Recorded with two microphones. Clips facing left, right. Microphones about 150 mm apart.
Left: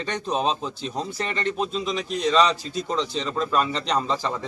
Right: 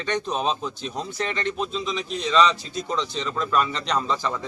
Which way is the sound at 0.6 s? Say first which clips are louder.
Left 1 dB; 30° left (ahead or behind).